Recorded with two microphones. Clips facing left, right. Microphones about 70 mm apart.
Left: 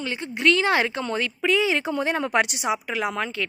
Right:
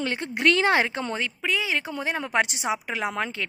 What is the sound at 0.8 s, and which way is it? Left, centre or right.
Speech, right.